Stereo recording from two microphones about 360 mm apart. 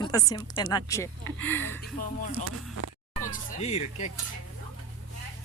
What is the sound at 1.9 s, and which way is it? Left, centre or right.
Speech, left.